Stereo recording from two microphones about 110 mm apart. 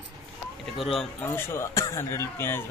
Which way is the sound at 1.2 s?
20° left (ahead or behind).